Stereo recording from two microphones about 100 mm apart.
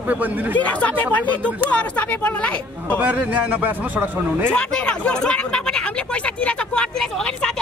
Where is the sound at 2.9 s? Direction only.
15° right (ahead or behind).